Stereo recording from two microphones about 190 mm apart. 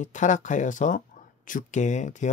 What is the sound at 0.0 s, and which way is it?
Speech, 40° left (ahead or behind).